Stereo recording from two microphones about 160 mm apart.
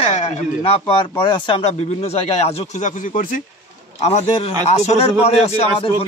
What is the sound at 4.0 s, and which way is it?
Speech, 45° left (ahead or behind).